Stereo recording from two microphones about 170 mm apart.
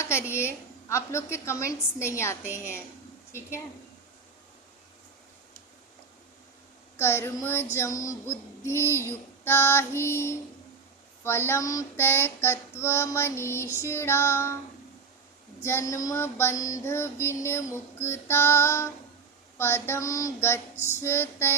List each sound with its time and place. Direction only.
0.0 s music: 15° left (ahead or behind)
6.9 s music: 15° left (ahead or behind)
15.6 s music: 15° left (ahead or behind)